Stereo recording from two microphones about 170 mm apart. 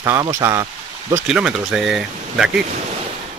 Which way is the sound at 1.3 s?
5° right (ahead or behind).